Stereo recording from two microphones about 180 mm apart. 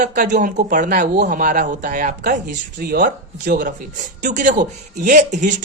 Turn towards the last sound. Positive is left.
turn(degrees=-45)  # may be behind; listen again after turning